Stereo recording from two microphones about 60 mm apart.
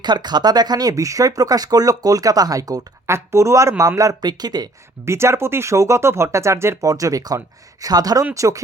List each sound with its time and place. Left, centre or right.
0.4 s speech: right
3.1 s speech: right
5.0 s speech: right
6.8 s speech: right
8.3 s speech: right